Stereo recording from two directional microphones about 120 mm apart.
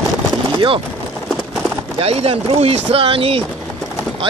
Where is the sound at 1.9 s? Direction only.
55° right (ahead or behind).